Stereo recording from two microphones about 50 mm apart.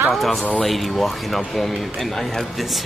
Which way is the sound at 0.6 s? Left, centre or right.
Centre.